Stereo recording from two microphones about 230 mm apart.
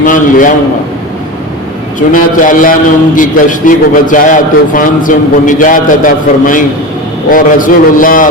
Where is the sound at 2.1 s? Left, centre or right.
Left.